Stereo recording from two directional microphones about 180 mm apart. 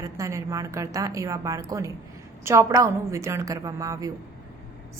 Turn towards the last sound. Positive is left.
turn(degrees=-20)  # may be behind; listen again after turning